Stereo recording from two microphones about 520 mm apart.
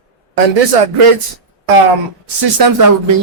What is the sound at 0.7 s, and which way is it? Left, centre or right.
Speech, right.